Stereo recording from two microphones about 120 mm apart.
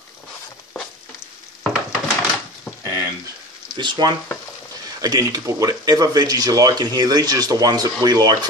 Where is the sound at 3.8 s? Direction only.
35° right (ahead or behind).